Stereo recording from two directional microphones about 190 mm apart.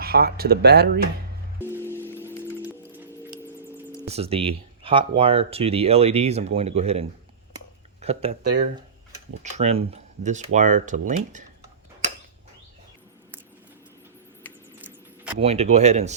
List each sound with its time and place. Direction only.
0.0 s speech: 55° right (ahead or behind)
1.5 s music: 10° left (ahead or behind)
4.0 s speech: 35° right (ahead or behind)
9.4 s speech: 35° right (ahead or behind)
14.8 s mouse: 10° right (ahead or behind)
15.4 s speech: 35° right (ahead or behind)